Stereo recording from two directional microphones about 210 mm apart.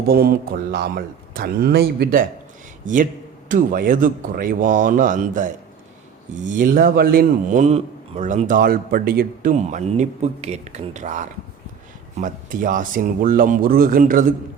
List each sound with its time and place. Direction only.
0.0 s a man's voice: 45° right (ahead or behind)